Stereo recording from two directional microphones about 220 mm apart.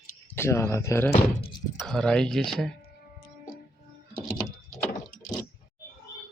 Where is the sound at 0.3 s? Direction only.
10° left (ahead or behind).